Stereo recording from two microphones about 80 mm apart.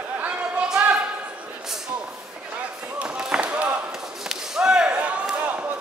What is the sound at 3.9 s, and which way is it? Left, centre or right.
Basketball bounce, centre.